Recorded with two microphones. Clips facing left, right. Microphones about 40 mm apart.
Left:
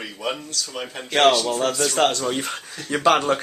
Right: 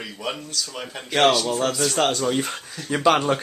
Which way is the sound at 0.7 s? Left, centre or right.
Centre.